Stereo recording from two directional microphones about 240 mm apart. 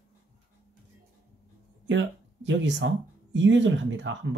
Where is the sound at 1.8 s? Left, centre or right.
Right.